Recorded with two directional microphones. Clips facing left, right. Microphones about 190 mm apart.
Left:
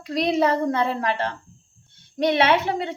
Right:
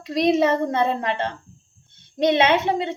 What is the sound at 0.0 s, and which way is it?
A child's voice, 25° right (ahead or behind).